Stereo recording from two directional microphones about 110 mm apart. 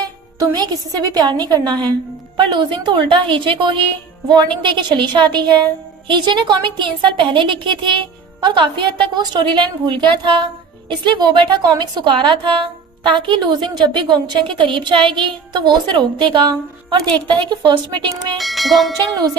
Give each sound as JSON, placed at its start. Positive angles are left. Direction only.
{"t": 0.0, "sound": "a woman's voice", "side_deg": -40}
{"t": 18.3, "sound": "speech", "side_deg": 0}